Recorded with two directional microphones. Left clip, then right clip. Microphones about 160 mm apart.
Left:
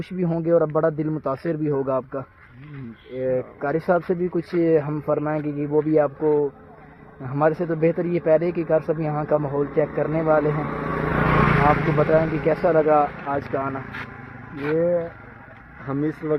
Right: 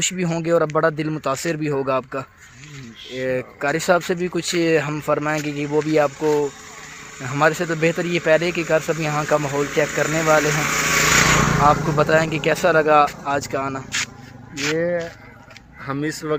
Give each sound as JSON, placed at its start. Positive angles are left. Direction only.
{"t": 0.0, "sound": "speech", "side_deg": -40}
{"t": 7.3, "sound": "speech", "side_deg": -40}
{"t": 10.7, "sound": "speech", "side_deg": -5}
{"t": 10.9, "sound": "vehicle", "side_deg": 10}
{"t": 11.9, "sound": "speech", "side_deg": -40}
{"t": 14.6, "sound": "speech", "side_deg": -10}